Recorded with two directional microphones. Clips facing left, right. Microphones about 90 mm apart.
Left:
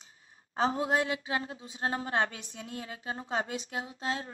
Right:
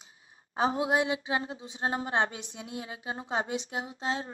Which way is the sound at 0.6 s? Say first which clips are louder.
Right 1 dB; 15° right (ahead or behind).